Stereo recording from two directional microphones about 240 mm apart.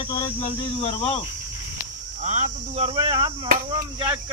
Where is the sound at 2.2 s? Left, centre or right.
Right.